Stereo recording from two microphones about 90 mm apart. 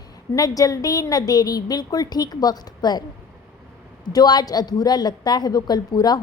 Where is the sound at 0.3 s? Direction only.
40° left (ahead or behind).